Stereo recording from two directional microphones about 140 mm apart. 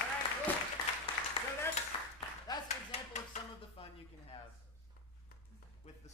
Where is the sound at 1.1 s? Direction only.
40° left (ahead or behind).